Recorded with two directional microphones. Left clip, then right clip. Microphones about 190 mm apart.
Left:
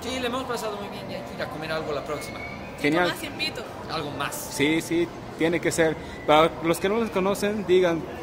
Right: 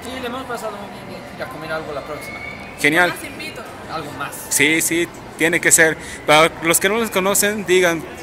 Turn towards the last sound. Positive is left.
turn(degrees=0)  # may be behind; listen again after turning